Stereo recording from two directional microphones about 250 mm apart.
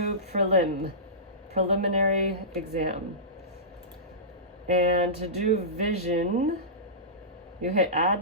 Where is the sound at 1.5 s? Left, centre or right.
Right.